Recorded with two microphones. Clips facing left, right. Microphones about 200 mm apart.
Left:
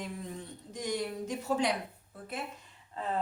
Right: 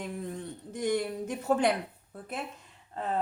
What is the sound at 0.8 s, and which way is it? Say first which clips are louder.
Speech: right 5 dB; 55° right (ahead or behind).